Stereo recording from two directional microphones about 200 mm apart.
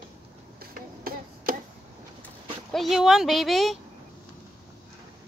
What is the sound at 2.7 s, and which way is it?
Speech, centre (ahead or behind).